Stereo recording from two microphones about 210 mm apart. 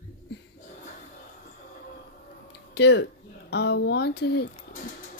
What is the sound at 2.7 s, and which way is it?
Speech, 50° left (ahead or behind).